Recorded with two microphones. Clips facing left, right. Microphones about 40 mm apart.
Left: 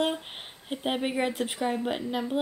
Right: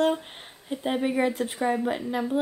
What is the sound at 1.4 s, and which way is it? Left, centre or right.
Speech, centre.